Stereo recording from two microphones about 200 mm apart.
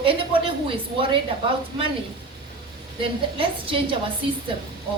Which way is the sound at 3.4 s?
25° right (ahead or behind).